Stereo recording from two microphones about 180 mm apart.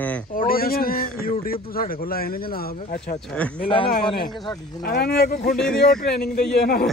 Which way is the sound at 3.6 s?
30° left (ahead or behind).